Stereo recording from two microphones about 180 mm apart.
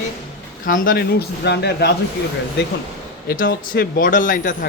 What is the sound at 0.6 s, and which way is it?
Speech, 50° left (ahead or behind).